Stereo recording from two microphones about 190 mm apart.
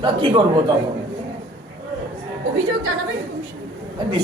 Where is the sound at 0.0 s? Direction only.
25° right (ahead or behind).